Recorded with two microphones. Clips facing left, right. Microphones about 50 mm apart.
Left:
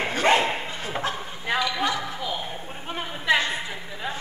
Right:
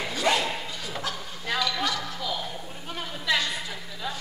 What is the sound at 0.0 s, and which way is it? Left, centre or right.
Dog, left.